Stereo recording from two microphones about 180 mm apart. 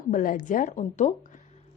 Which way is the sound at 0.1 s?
50° left (ahead or behind).